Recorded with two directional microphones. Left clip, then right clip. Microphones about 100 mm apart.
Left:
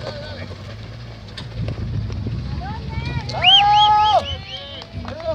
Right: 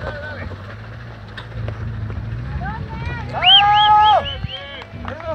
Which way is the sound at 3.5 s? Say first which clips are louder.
Right 2 dB; 35° right (ahead or behind).